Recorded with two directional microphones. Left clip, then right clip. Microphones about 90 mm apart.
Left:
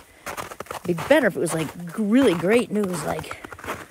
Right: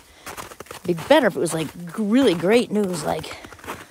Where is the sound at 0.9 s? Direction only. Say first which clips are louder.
Right 2 dB; 20° right (ahead or behind).